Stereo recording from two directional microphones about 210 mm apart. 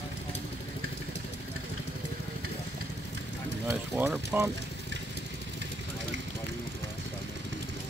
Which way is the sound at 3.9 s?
5° right (ahead or behind).